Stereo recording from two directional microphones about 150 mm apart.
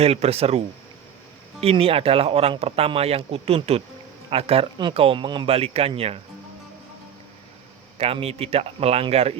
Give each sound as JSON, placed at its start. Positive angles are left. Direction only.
{"t": 0.0, "sound": "speech", "side_deg": -45}
{"t": 1.6, "sound": "speech", "side_deg": -40}
{"t": 7.9, "sound": "speech", "side_deg": -40}